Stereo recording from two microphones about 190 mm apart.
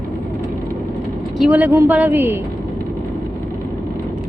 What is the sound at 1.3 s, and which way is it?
Speech, 5° right (ahead or behind).